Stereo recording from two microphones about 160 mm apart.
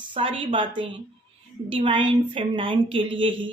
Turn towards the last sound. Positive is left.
turn(degrees=-30)  # may be behind; listen again after turning